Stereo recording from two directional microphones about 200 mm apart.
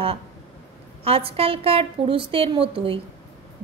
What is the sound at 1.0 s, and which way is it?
A woman's voice, 30° right (ahead or behind).